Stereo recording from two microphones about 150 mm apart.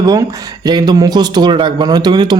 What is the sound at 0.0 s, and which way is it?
Speech, 25° right (ahead or behind).